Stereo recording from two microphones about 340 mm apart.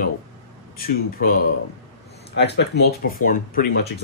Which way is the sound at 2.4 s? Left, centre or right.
Left.